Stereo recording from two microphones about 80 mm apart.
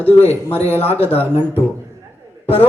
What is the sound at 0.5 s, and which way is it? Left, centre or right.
Speech, left.